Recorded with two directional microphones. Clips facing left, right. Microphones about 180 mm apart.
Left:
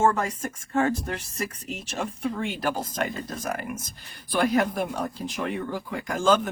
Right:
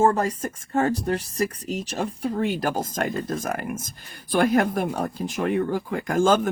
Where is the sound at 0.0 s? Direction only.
35° right (ahead or behind).